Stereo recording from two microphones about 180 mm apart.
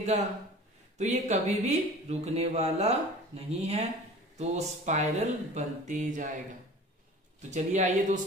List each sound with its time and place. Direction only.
0.9 s speech: 40° right (ahead or behind)
7.5 s speech: 40° right (ahead or behind)